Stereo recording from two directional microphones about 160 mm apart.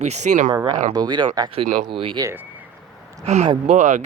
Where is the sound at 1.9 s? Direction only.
35° right (ahead or behind).